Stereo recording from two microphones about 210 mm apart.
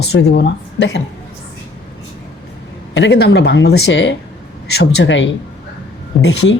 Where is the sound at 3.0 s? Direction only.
55° left (ahead or behind).